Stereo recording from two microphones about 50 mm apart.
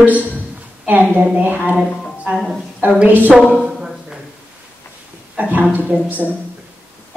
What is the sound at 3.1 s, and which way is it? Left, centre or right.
Speech, right.